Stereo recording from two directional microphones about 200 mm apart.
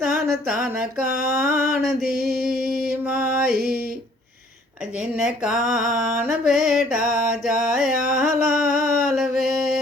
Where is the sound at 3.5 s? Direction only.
50° right (ahead or behind).